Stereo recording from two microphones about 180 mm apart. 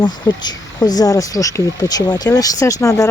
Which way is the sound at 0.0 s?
25° left (ahead or behind).